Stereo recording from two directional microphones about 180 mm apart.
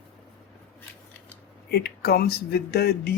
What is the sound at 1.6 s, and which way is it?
Speech, 65° left (ahead or behind).